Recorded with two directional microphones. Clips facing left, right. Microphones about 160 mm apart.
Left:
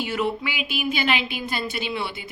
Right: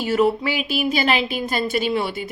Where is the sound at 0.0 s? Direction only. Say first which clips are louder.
Right 7 dB; 40° right (ahead or behind).